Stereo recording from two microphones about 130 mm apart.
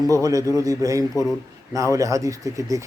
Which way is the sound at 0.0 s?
25° right (ahead or behind).